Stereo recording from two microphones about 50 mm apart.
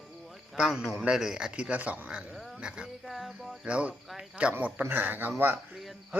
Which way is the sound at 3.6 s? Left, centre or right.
Right.